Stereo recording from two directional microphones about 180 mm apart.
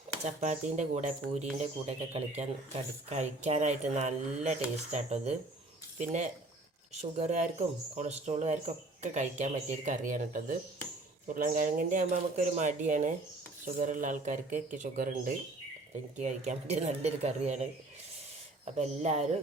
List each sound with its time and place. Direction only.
0.3 s speech: 40° right (ahead or behind)
7.0 s speech: 40° right (ahead or behind)